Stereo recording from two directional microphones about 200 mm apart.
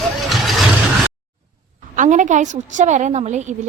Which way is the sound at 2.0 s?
40° right (ahead or behind).